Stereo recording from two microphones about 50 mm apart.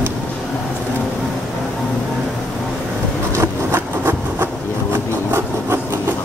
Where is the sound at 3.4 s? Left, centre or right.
Right.